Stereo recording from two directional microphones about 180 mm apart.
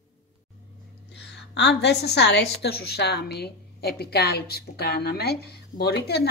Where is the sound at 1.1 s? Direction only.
70° left (ahead or behind).